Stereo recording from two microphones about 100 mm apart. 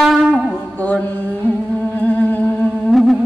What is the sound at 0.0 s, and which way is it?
Wind instrument, centre (ahead or behind).